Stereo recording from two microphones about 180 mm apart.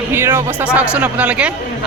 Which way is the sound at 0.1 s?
15° right (ahead or behind).